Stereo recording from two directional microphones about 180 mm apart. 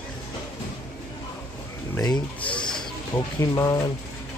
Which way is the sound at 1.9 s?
20° left (ahead or behind).